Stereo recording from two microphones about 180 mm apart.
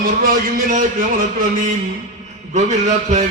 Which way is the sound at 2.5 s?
40° right (ahead or behind).